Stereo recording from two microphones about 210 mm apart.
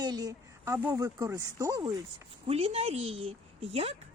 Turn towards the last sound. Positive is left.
turn(degrees=-30)  # may be behind; listen again after turning